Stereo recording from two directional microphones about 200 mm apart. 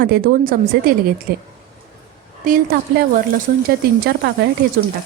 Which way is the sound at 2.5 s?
45° right (ahead or behind).